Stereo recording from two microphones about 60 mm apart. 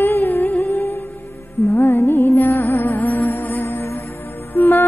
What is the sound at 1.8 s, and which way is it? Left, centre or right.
Music, left.